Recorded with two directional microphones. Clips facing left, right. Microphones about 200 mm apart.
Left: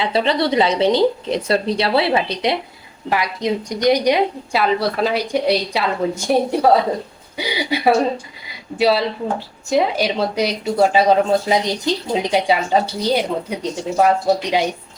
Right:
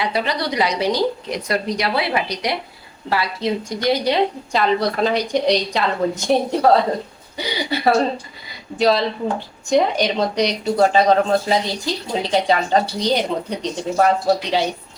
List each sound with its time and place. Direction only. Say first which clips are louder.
0.0 s a woman's voice: left 4 dB; 25° left (ahead or behind); by 14.1 s 10° left (ahead or behind)